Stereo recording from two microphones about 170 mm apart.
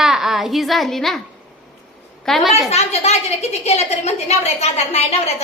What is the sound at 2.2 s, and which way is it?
Speech, centre (ahead or behind).